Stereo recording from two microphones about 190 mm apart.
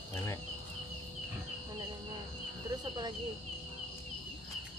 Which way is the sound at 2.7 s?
20° right (ahead or behind).